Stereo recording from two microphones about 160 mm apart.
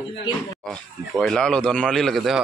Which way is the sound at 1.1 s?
5° left (ahead or behind).